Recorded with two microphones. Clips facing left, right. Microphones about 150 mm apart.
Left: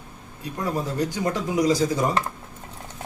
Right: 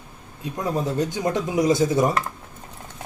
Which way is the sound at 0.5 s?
20° right (ahead or behind).